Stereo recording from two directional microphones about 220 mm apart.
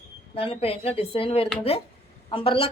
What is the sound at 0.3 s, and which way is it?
Speech, 25° left (ahead or behind).